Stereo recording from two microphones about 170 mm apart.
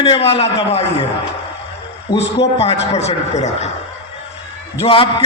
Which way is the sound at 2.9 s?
40° left (ahead or behind).